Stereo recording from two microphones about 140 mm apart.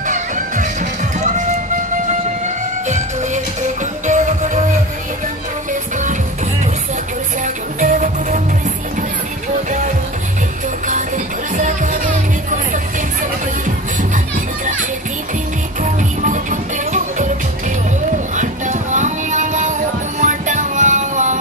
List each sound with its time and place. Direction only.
0.0 s music: 65° right (ahead or behind)
4.0 s music: 60° right (ahead or behind)
5.7 s music: 65° right (ahead or behind)
7.4 s music: 65° right (ahead or behind)
11.5 s music: 65° right (ahead or behind)
15.8 s music: 65° right (ahead or behind)
18.3 s music: 60° right (ahead or behind)